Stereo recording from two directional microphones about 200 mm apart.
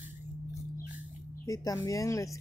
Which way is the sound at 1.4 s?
15° left (ahead or behind).